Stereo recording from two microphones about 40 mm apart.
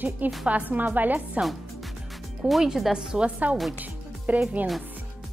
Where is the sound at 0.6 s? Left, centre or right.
Right.